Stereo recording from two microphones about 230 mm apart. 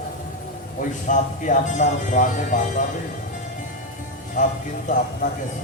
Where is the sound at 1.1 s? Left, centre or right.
Left.